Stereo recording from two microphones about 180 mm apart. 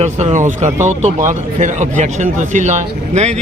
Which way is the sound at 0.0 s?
40° right (ahead or behind).